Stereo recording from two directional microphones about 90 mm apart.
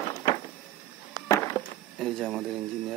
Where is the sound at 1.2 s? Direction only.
35° left (ahead or behind).